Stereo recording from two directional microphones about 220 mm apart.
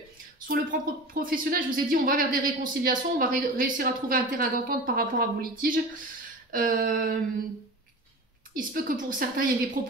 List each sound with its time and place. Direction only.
0.5 s a woman's voice: 40° right (ahead or behind)
8.5 s a woman's voice: 40° right (ahead or behind)